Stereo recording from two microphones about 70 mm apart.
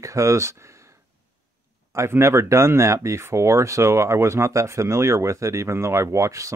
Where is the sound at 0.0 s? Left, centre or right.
Right.